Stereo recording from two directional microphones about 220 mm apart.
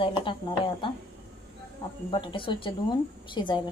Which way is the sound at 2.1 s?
20° left (ahead or behind).